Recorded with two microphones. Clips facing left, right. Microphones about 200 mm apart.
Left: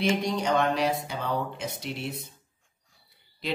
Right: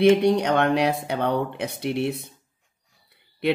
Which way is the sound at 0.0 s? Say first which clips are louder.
Right 9 dB; 65° right (ahead or behind).